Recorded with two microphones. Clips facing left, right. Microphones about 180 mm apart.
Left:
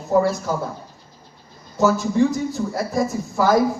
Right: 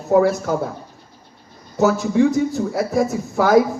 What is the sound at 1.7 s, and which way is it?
Speech, 70° right (ahead or behind).